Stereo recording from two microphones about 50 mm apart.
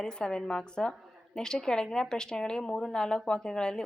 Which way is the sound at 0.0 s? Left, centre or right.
Centre.